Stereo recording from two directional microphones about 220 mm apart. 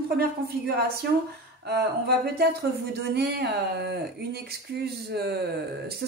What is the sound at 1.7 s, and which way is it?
Speech, 45° right (ahead or behind).